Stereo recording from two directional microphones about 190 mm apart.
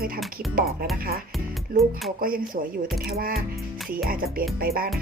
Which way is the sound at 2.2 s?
50° right (ahead or behind).